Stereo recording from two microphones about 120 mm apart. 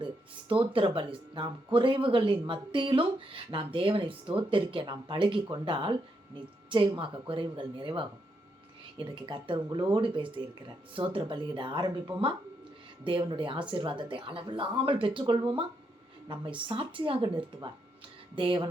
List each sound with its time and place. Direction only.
0.7 s speech: 45° right (ahead or behind)
13.1 s speech: 45° right (ahead or behind)